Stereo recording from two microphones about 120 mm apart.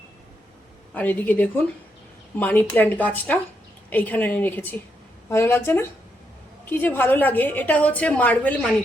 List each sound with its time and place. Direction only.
0.9 s a woman's voice: 15° left (ahead or behind)